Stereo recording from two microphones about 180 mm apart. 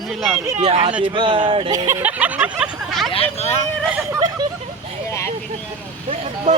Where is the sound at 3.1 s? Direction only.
35° left (ahead or behind).